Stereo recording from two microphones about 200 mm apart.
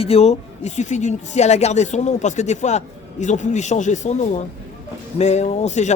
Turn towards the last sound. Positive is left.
turn(degrees=35)  # may be behind; listen again after turning